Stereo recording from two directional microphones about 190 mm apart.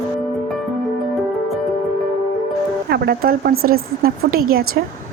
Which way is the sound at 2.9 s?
55° right (ahead or behind).